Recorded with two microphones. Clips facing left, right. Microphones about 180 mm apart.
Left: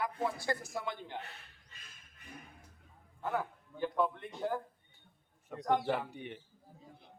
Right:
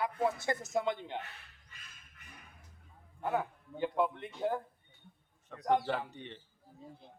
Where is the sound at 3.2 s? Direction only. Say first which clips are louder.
Right 2 dB; 20° right (ahead or behind).